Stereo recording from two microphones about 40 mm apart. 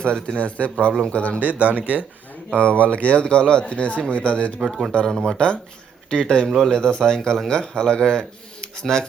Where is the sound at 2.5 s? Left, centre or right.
Left.